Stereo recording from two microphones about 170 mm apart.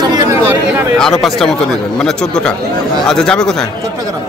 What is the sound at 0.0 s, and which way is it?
Chatter, 20° right (ahead or behind).